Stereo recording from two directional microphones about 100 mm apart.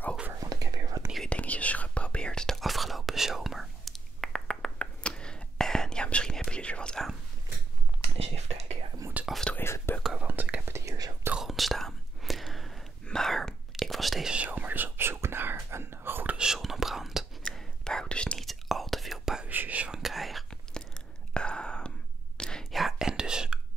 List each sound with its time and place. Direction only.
0.3 s whispering: 35° right (ahead or behind)
1.3 s whispering: 15° left (ahead or behind)
8.0 s a sound: 90° right
9.3 s whispering: 5° left (ahead or behind)
9.6 s whispering: 25° left (ahead or behind)
10.2 s whispering: 15° right (ahead or behind)
10.7 s whispering: 35° right (ahead or behind)
11.3 s whispering: centre (ahead or behind)
14.3 s whispering: 15° right (ahead or behind)
16.3 s whispering: 5° right (ahead or behind)
19.5 s whispering: 15° right (ahead or behind)